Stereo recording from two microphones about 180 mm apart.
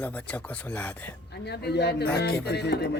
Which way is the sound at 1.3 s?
65° left (ahead or behind).